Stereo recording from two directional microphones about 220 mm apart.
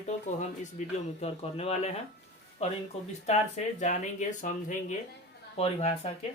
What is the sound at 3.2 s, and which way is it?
Speech, 30° left (ahead or behind).